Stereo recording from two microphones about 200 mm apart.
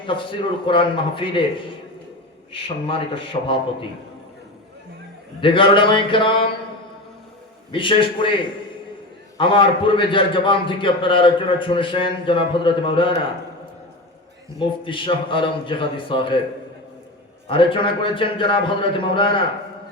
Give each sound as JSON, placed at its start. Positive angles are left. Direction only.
{"t": 0.0, "sound": "a man's voice", "side_deg": 25}
{"t": 5.4, "sound": "a man's voice", "side_deg": 25}
{"t": 7.7, "sound": "a man's voice", "side_deg": 25}
{"t": 9.4, "sound": "a man's voice", "side_deg": 25}
{"t": 14.6, "sound": "a man's voice", "side_deg": 25}
{"t": 17.5, "sound": "a man's voice", "side_deg": 25}